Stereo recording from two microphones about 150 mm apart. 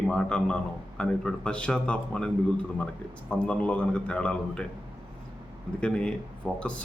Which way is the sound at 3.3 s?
5° left (ahead or behind).